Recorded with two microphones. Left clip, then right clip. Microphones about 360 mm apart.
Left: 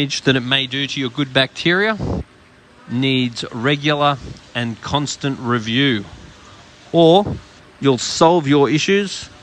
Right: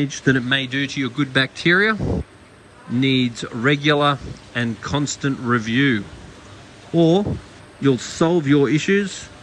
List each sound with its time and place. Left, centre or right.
0.0 s speech: centre
2.0 s speech: right
3.0 s speech: centre
7.0 s speech: right
7.8 s speech: centre